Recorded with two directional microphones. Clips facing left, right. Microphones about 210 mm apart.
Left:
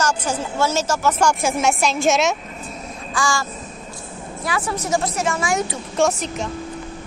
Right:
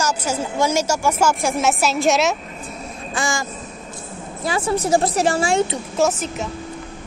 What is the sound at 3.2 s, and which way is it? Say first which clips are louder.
Speech: left 1 dB; 20° right (ahead or behind).